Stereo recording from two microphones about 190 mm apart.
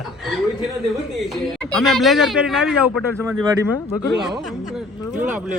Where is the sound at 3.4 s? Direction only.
20° right (ahead or behind).